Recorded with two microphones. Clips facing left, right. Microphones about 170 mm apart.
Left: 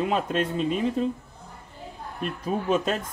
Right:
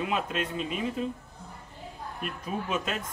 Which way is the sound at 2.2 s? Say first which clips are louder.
Left 7 dB; 35° left (ahead or behind).